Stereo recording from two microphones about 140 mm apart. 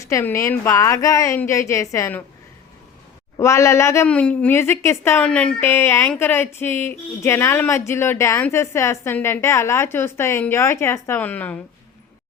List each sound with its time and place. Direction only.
0.0 s a woman's voice: 20° left (ahead or behind)
3.3 s a woman's voice: 20° left (ahead or behind)
4.1 s a woman's voice: 10° left (ahead or behind)